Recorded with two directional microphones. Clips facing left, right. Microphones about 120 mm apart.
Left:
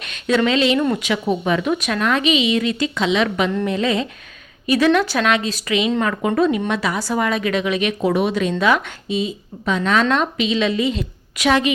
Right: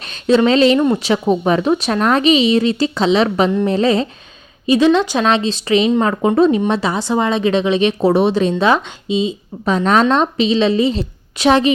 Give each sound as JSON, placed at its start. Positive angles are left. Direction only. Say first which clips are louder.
{"t": 0.1, "sound": "speech", "louder": "right 5 dB", "side_deg": -30}
{"t": 4.6, "sound": "a woman's voice", "louder": "right 4 dB", "side_deg": -25}
{"t": 9.6, "sound": "speech", "louder": "right 4 dB", "side_deg": -35}